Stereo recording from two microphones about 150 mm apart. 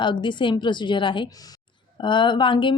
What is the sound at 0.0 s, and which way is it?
Speech, 30° left (ahead or behind).